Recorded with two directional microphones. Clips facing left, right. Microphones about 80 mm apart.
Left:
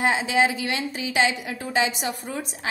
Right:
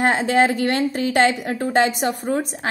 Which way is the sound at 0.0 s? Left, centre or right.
Right.